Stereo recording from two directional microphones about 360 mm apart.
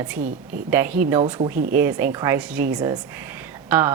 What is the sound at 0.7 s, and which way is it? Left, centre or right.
A woman's voice, centre.